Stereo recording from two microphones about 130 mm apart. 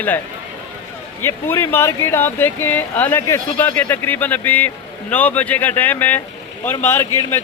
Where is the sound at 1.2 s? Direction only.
20° left (ahead or behind).